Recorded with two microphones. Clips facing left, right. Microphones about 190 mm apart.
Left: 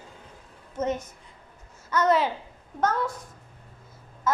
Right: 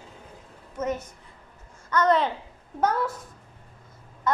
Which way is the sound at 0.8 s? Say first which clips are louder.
Left 1 dB; 25° left (ahead or behind).